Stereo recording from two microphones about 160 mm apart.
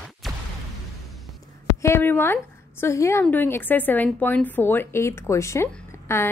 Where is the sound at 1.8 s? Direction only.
15° left (ahead or behind).